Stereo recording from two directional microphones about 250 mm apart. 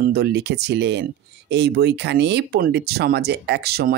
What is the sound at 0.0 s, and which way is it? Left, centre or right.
Speech, right.